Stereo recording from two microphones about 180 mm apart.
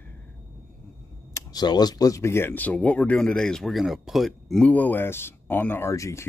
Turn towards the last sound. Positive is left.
turn(degrees=15)  # may be behind; listen again after turning